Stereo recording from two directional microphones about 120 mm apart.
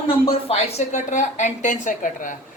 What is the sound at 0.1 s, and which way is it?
A woman's voice, 50° left (ahead or behind).